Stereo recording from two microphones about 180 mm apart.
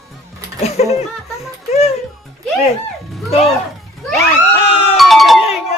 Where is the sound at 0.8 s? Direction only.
35° left (ahead or behind).